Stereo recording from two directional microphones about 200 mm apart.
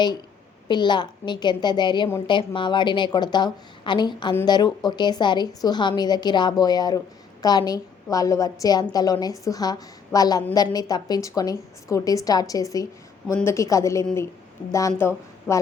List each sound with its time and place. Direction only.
0.7 s a woman's voice: 20° left (ahead or behind)